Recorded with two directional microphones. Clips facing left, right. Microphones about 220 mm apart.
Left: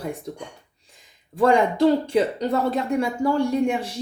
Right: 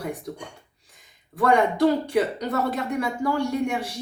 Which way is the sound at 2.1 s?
25° left (ahead or behind).